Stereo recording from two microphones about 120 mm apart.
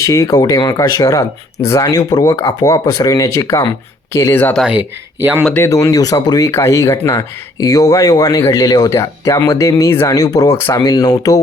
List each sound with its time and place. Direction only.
0.0 s speech: 25° left (ahead or behind)
5.5 s speech: 25° left (ahead or behind)